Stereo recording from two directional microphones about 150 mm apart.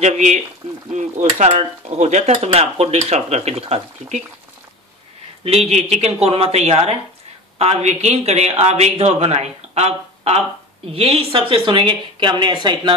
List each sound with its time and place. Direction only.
0.0 s speech: 50° right (ahead or behind)
5.4 s speech: 40° right (ahead or behind)